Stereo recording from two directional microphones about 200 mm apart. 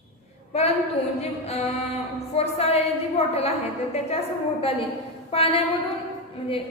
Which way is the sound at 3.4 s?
30° left (ahead or behind).